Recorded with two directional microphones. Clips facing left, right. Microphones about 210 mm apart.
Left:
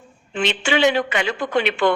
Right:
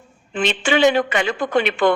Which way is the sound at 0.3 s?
45° right (ahead or behind).